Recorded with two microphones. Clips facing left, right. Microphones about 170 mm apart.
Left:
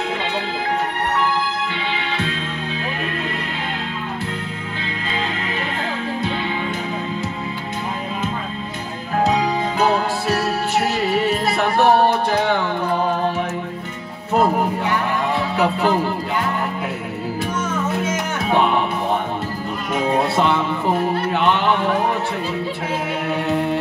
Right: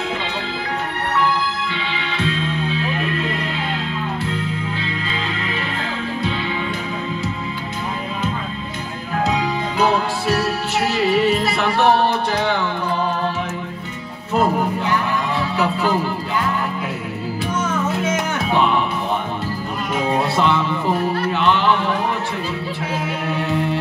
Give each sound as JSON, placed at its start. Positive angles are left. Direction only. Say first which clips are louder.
{"t": 2.1, "sound": "music", "louder": "right 3 dB", "side_deg": 45}
{"t": 9.3, "sound": "music", "louder": "left 2 dB", "side_deg": 40}
{"t": 15.5, "sound": "music", "louder": "left 1 dB", "side_deg": 55}
{"t": 18.5, "sound": "music", "louder": "left 1 dB", "side_deg": 50}
{"t": 20.3, "sound": "music", "louder": "even", "side_deg": 50}
{"t": 21.3, "sound": "a sound", "louder": "right 1 dB", "side_deg": 55}